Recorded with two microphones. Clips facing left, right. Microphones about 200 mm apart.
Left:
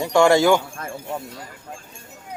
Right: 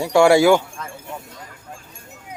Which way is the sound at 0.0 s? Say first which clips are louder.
Right 2 dB; 10° right (ahead or behind).